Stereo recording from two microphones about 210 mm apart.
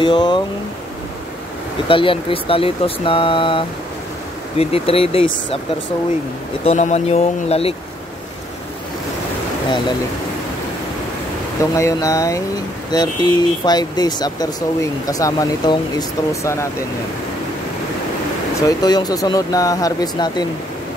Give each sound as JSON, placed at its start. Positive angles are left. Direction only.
{"t": 0.0, "sound": "speech", "side_deg": 20}
{"t": 1.9, "sound": "speech", "side_deg": 25}
{"t": 6.6, "sound": "speech", "side_deg": 30}
{"t": 11.7, "sound": "speech", "side_deg": 15}
{"t": 18.7, "sound": "speech", "side_deg": 20}